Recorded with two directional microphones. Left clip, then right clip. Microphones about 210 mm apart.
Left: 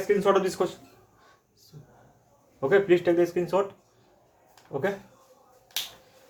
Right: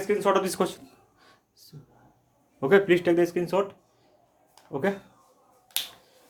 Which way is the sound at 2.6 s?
45° right (ahead or behind).